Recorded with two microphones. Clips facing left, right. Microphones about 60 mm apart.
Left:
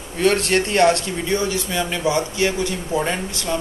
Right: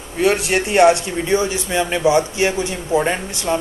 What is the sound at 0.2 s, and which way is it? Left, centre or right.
Speech, centre.